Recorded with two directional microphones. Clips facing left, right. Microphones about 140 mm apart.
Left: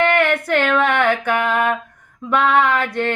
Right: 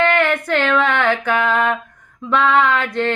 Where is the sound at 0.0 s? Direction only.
15° left (ahead or behind).